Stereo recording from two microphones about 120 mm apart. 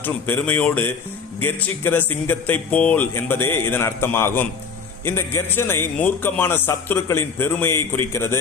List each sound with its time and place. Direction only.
0.0 s a man's voice: 15° left (ahead or behind)